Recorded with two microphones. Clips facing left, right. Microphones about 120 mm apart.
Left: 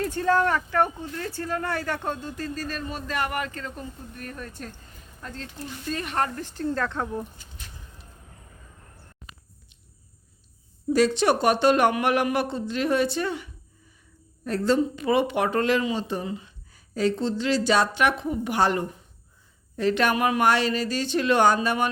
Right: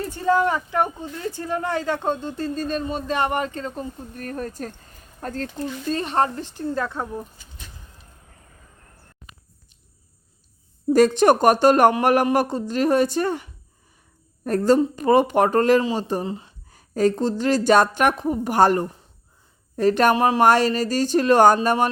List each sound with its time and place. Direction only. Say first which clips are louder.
0.0 s speech: right 2 dB; 5° right (ahead or behind); by 5.6 s 45° right (ahead or behind)
5.9 s speech: right 5 dB; 30° right (ahead or behind); by 7.3 s 5° right (ahead or behind)
10.8 s a woman's voice: right 5 dB; 45° right (ahead or behind)
16.7 s a woman's voice: right 5 dB; 45° right (ahead or behind)
20.1 s a woman's voice: right 5 dB; 30° right (ahead or behind)